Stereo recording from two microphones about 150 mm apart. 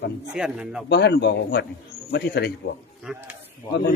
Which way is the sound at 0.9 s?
90° left.